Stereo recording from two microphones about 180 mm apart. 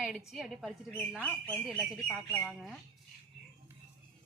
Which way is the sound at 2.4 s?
Centre (ahead or behind).